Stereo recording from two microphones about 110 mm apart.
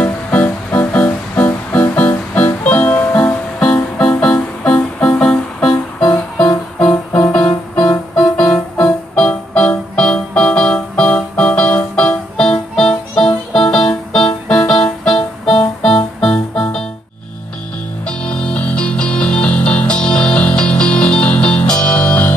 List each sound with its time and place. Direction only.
0.0 s music: 15° left (ahead or behind)
5.7 s music: 35° left (ahead or behind)
7.1 s music: 20° left (ahead or behind)
18.0 s music: 10° left (ahead or behind)